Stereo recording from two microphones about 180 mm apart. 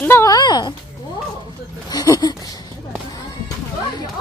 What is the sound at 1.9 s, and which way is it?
Speech, 20° left (ahead or behind).